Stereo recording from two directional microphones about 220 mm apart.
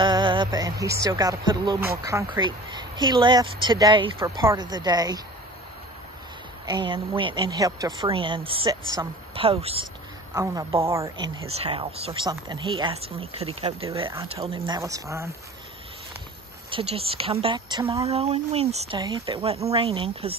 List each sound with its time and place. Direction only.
0.0 s a woman's voice: 20° right (ahead or behind)
6.6 s a woman's voice: 20° right (ahead or behind)
10.3 s a woman's voice: 15° right (ahead or behind)
11.5 s a woman's voice: 25° right (ahead or behind)
16.7 s a woman's voice: 25° right (ahead or behind)